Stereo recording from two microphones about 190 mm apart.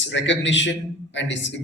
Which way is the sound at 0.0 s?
70° left (ahead or behind).